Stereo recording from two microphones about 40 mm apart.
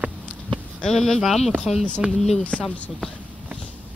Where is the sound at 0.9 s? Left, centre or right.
Centre.